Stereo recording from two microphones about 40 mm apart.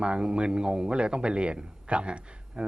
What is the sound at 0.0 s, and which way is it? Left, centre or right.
A man's voice, right.